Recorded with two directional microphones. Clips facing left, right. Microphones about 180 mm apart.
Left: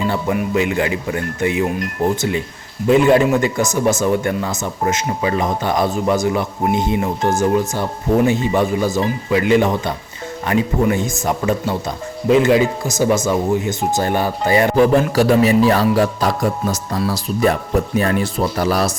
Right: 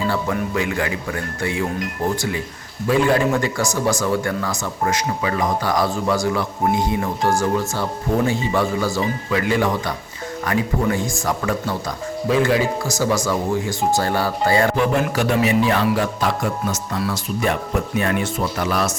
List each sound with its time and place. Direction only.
0.1 s a man's voice: 20° left (ahead or behind)
14.8 s a man's voice: 35° left (ahead or behind)